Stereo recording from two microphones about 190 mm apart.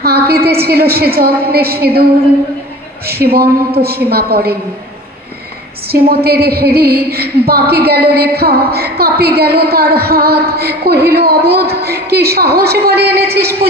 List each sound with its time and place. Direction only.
0.0 s a woman's voice: 55° right (ahead or behind)
3.8 s a woman's voice: 55° right (ahead or behind)
5.9 s a woman's voice: 55° right (ahead or behind)